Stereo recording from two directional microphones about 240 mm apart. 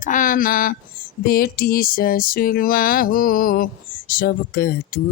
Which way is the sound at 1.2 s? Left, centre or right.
Left.